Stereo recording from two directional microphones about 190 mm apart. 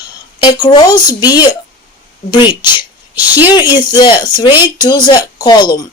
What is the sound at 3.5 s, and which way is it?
Speech, 20° left (ahead or behind).